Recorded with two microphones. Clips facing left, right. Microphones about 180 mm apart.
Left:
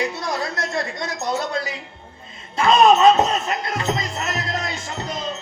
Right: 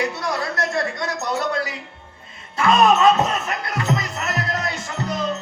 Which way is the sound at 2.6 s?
20° left (ahead or behind).